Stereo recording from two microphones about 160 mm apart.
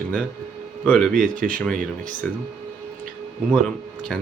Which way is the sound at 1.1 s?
55° right (ahead or behind).